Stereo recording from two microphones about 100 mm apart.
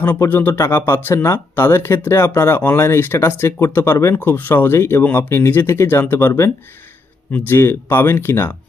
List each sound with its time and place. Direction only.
0.2 s speech: 20° left (ahead or behind)